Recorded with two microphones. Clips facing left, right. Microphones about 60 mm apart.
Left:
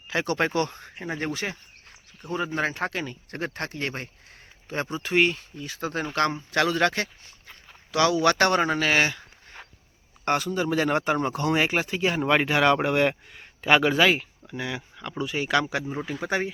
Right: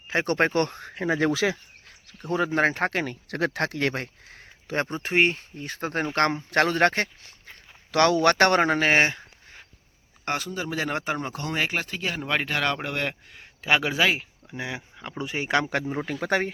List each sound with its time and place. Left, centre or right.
0.1 s speech: right
2.6 s speech: right
5.0 s speech: right
7.9 s speech: right
10.2 s a man's voice: centre
14.4 s speech: right
16.2 s speech: right